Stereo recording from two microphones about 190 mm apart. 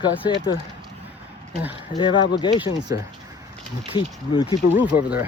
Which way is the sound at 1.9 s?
25° left (ahead or behind).